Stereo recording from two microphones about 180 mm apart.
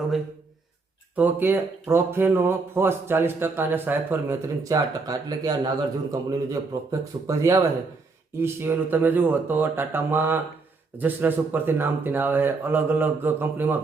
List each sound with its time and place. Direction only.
1.1 s speech: 10° right (ahead or behind)